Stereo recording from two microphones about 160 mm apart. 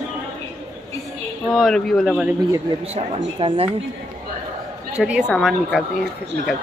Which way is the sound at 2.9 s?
35° right (ahead or behind).